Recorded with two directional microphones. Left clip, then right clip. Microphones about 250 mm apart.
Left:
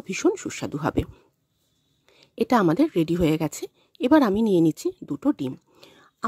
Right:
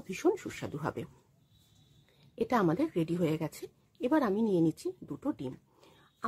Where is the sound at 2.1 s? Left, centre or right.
Left.